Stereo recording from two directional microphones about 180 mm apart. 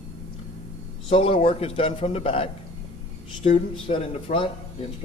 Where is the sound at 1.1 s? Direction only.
30° left (ahead or behind).